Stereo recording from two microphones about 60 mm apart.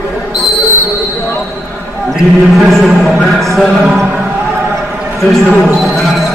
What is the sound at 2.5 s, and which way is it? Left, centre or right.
Speech, centre.